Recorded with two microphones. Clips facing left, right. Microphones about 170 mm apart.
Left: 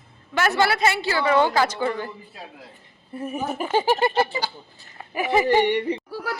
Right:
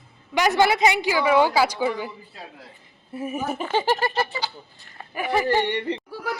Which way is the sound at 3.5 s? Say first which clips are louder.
Left 3 dB; 10° left (ahead or behind).